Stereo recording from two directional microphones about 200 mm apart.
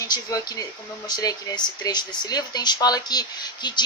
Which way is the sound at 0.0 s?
15° left (ahead or behind).